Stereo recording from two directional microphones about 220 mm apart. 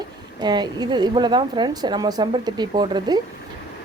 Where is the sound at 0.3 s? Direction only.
20° right (ahead or behind).